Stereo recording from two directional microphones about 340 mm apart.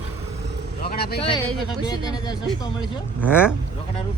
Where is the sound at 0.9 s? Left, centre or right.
Left.